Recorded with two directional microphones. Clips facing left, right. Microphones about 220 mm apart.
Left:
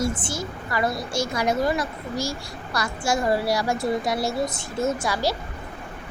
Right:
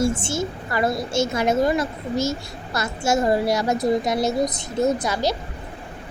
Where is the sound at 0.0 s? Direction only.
25° right (ahead or behind).